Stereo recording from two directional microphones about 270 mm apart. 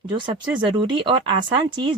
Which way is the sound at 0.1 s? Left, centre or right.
Centre.